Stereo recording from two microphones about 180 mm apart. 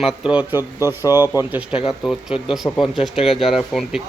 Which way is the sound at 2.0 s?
5° left (ahead or behind).